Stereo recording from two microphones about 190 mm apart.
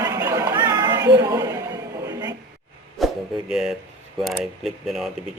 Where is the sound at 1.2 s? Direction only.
15° right (ahead or behind).